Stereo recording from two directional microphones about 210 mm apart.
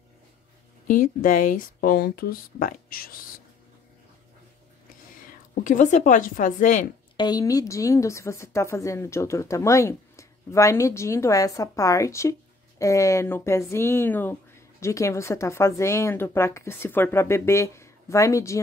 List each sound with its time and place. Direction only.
0.8 s speech: 40° left (ahead or behind)
5.5 s speech: 40° left (ahead or behind)
7.2 s a woman's voice: 20° left (ahead or behind)